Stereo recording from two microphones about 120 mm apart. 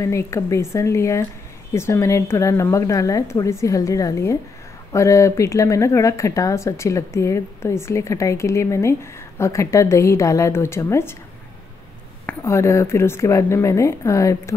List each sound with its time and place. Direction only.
0.0 s speech: 25° left (ahead or behind)
12.4 s speech: 25° left (ahead or behind)